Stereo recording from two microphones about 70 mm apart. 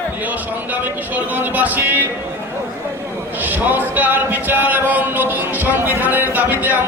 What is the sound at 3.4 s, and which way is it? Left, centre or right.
Music, right.